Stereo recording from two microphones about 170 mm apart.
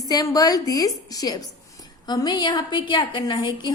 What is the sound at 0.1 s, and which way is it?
A woman's voice, 20° left (ahead or behind).